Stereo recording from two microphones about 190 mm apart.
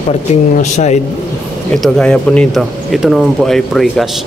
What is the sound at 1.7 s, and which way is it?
A man's voice, centre (ahead or behind).